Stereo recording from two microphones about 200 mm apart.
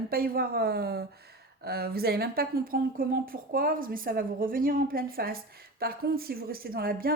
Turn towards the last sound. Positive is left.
turn(degrees=-45)  # may be behind; listen again after turning